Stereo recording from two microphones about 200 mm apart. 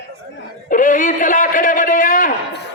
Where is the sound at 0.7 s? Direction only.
40° left (ahead or behind).